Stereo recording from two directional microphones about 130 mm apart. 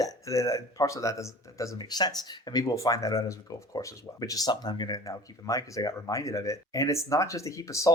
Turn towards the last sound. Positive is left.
turn(degrees=25)  # may be behind; listen again after turning